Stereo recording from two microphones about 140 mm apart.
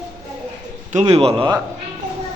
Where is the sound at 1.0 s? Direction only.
45° right (ahead or behind).